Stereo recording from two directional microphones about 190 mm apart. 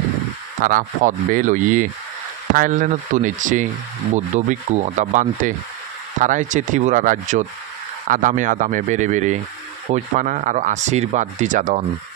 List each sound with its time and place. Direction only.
0.6 s speech: 45° right (ahead or behind)